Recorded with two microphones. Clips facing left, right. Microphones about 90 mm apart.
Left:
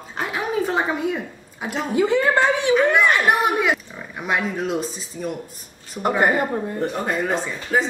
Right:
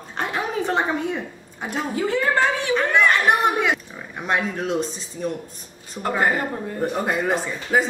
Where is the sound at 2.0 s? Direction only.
20° left (ahead or behind).